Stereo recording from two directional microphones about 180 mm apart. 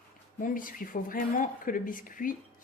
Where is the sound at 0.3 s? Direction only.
50° left (ahead or behind).